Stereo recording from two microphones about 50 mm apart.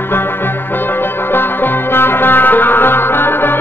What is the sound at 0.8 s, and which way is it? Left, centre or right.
Music, left.